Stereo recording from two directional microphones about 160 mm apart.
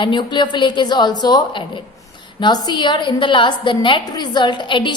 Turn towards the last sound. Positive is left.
turn(degrees=30)  # may be behind; listen again after turning